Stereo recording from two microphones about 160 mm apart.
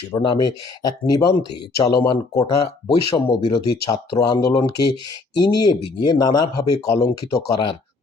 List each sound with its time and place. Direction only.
0.1 s speech: 25° left (ahead or behind)